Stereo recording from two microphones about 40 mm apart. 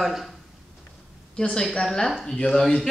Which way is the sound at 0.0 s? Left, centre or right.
Centre.